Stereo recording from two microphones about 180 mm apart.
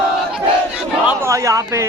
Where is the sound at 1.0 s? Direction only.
15° right (ahead or behind).